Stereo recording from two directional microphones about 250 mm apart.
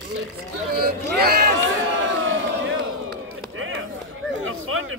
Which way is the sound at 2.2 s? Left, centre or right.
Right.